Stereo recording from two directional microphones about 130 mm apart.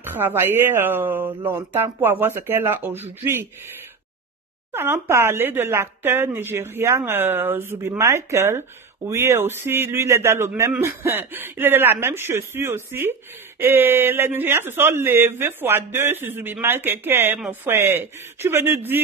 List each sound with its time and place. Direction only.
0.0 s speech: 15° right (ahead or behind)
4.7 s speech: 20° right (ahead or behind)